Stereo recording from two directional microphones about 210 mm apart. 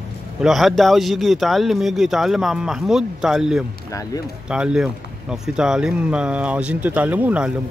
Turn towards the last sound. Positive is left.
turn(degrees=-5)  # may be behind; listen again after turning